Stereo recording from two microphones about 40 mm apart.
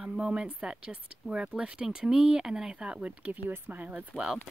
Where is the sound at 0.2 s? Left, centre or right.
Right.